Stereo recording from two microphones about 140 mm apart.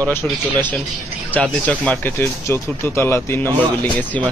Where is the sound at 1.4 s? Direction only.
10° left (ahead or behind).